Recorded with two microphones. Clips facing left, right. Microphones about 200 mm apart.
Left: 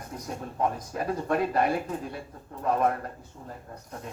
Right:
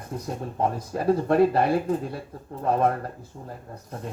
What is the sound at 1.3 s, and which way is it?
Speech, 30° right (ahead or behind).